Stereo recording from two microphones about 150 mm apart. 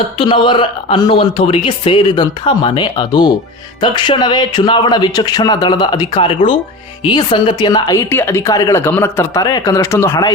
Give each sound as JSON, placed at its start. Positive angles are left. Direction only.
{"t": 0.2, "sound": "speech", "side_deg": 35}